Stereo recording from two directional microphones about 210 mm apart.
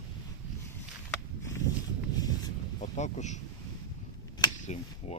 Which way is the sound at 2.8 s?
35° left (ahead or behind).